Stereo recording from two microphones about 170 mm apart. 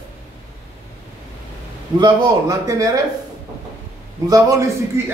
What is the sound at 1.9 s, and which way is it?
A man's voice, 25° right (ahead or behind).